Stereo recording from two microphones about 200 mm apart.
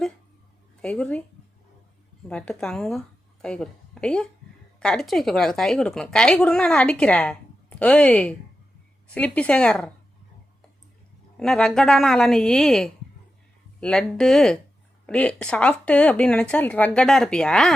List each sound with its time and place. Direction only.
0.8 s a woman's voice: 5° left (ahead or behind)
2.3 s a woman's voice: 5° left (ahead or behind)
11.3 s a woman's voice: 5° left (ahead or behind)